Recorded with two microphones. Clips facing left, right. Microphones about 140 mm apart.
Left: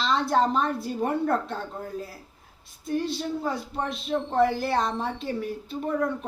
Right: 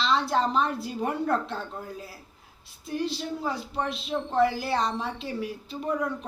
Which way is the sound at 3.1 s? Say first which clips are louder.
Left 2 dB; 50° left (ahead or behind).